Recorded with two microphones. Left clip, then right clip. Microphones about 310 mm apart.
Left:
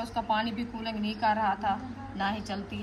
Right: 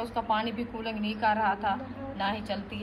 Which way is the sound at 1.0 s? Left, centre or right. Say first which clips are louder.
Right 1 dB; left.